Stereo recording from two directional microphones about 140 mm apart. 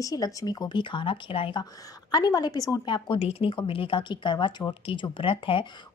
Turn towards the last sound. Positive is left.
turn(degrees=40)  # may be behind; listen again after turning